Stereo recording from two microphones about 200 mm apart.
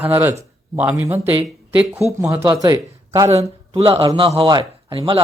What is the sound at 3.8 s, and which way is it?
A man's voice, 25° right (ahead or behind).